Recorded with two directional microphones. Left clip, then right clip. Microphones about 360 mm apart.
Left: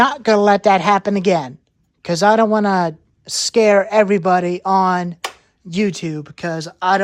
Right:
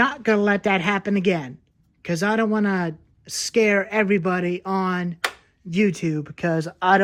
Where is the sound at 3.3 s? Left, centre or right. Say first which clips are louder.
Left 5 dB; left.